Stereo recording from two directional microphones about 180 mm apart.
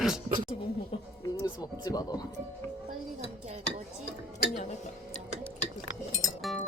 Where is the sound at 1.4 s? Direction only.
20° left (ahead or behind).